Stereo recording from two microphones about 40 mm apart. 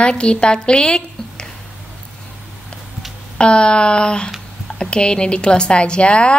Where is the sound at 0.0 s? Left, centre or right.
Left.